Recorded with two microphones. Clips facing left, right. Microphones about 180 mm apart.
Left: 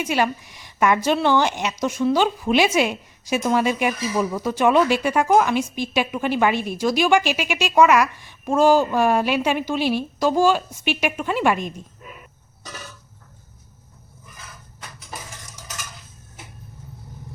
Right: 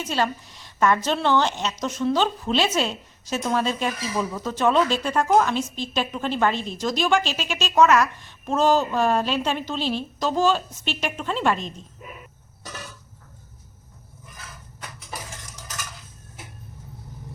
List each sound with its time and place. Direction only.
0.0 s a woman's voice: 10° left (ahead or behind)